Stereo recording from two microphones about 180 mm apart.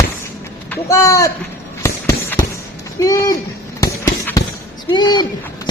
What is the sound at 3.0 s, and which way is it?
Speech, 20° left (ahead or behind).